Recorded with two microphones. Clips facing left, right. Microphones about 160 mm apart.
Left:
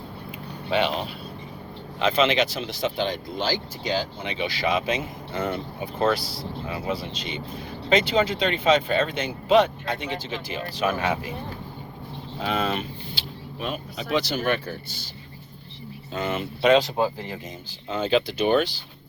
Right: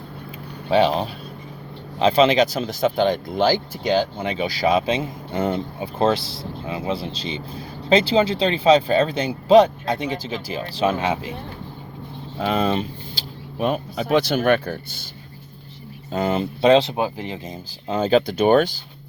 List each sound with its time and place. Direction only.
0.7 s speech: 40° right (ahead or behind); by 11.3 s 20° right (ahead or behind)
12.4 s speech: 40° right (ahead or behind)
13.6 s speech: 50° right (ahead or behind)
16.1 s speech: 35° right (ahead or behind)
17.0 s speech: 20° right (ahead or behind)
17.8 s speech: 40° right (ahead or behind)